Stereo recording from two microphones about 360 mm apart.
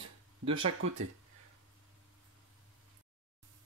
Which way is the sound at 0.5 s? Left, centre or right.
Right.